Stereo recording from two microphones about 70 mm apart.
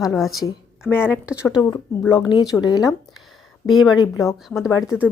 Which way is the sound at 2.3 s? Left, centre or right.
Left.